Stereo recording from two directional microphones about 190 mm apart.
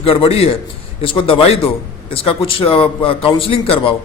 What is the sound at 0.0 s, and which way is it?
A man's voice, 30° left (ahead or behind).